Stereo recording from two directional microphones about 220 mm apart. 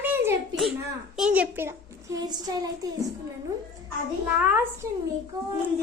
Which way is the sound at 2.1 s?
20° right (ahead or behind).